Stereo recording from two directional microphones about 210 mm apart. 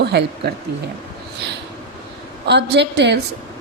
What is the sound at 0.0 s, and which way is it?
Speech, 50° right (ahead or behind).